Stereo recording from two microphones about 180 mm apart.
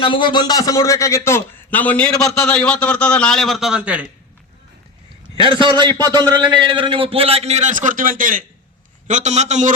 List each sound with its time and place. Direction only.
0.0 s a man's voice: 25° left (ahead or behind); by 4.0 s 5° right (ahead or behind)
5.4 s a man's voice: 25° right (ahead or behind)